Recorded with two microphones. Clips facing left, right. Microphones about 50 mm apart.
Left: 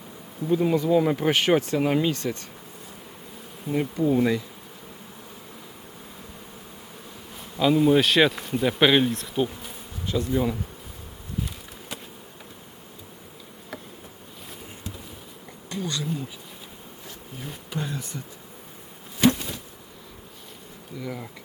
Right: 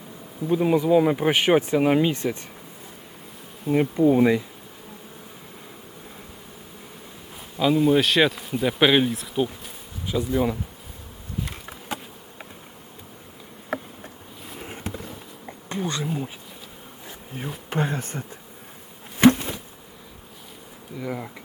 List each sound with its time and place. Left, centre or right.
0.4 s speech: centre
3.7 s bee: right
7.6 s speech: centre
13.7 s insect: right
14.6 s a sound: right
15.4 s insect: right
17.7 s speech: right
19.2 s insect: right
21.0 s speech: centre